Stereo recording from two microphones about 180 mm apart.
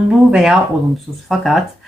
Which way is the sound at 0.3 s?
5° right (ahead or behind).